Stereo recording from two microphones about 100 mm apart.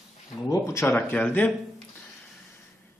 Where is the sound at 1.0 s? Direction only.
15° left (ahead or behind).